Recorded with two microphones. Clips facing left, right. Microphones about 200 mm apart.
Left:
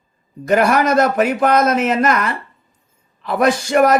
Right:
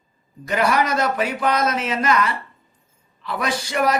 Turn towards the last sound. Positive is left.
turn(degrees=50)  # may be behind; listen again after turning